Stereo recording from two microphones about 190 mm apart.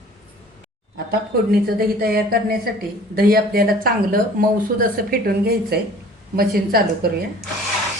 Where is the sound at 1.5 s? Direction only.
55° right (ahead or behind).